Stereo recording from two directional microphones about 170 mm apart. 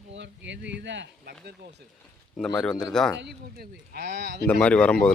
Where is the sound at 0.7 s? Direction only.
90° right.